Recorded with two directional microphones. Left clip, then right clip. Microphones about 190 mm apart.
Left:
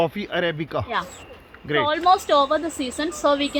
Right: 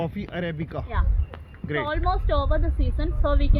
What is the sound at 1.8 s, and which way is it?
Speech, 20° right (ahead or behind).